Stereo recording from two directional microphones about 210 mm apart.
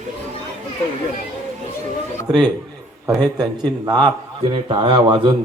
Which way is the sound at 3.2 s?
20° right (ahead or behind).